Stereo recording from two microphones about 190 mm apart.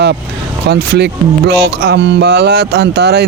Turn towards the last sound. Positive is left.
turn(degrees=-60)  # may be behind; listen again after turning